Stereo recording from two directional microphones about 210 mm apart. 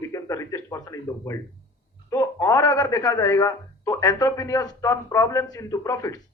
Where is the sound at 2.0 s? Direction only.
15° left (ahead or behind).